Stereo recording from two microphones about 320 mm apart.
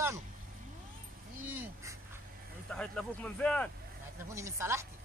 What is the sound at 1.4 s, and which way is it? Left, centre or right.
Speech, centre.